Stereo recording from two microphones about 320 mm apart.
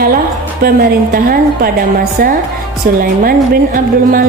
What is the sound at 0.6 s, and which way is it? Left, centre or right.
Speech, right.